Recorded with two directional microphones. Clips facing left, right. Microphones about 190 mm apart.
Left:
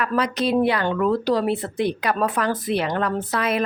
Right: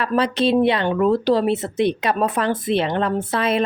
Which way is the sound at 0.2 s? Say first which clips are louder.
Right 3 dB; 25° right (ahead or behind).